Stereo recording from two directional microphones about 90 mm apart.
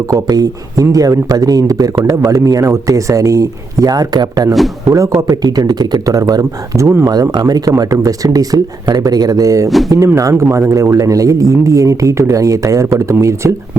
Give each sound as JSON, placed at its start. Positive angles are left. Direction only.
{"t": 0.1, "sound": "speech", "side_deg": -40}
{"t": 4.9, "sound": "speech", "side_deg": -35}
{"t": 7.1, "sound": "speech", "side_deg": -50}